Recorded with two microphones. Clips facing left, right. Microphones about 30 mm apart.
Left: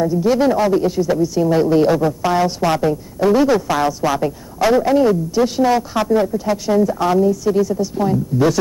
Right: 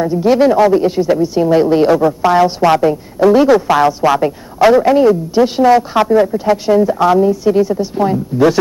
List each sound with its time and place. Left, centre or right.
0.0 s speech: right